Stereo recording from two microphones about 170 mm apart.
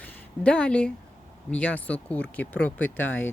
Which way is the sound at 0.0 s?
5° left (ahead or behind).